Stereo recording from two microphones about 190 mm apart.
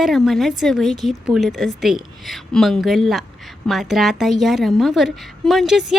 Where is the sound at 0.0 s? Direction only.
Centre (ahead or behind).